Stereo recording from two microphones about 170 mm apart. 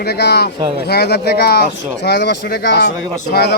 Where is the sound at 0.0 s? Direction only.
75° left (ahead or behind); by 2.9 s 90° left.